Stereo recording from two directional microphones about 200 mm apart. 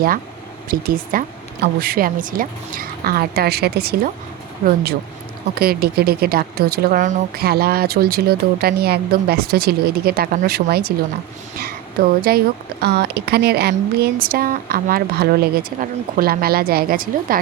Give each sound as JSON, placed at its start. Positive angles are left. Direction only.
{"t": 0.7, "sound": "speech", "side_deg": -45}
{"t": 12.0, "sound": "speech", "side_deg": -50}